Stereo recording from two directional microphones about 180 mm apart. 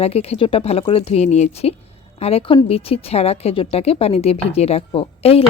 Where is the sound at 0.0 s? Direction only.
35° left (ahead or behind).